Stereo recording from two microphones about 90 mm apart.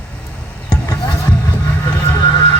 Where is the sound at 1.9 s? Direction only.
25° left (ahead or behind).